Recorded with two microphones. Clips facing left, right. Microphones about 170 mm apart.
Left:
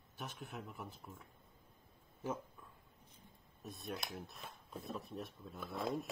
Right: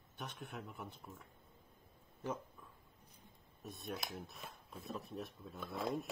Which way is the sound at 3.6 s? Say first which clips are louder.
Even; centre (ahead or behind).